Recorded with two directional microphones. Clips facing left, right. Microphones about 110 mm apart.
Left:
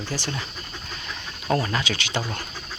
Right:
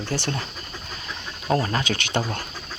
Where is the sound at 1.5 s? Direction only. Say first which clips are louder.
Right 1 dB; 35° right (ahead or behind).